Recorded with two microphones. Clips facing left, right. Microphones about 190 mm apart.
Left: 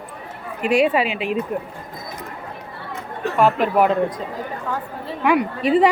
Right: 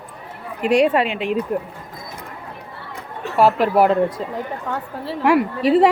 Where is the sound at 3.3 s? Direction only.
35° right (ahead or behind).